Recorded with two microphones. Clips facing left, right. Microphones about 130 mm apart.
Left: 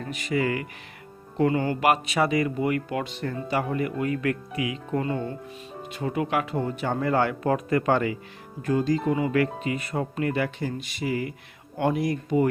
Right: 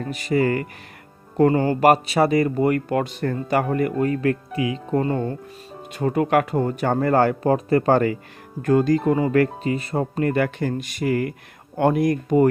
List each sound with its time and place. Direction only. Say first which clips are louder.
0.0 s speech: right 5 dB; 40° right (ahead or behind)
8.6 s speech: right 6 dB; 55° right (ahead or behind)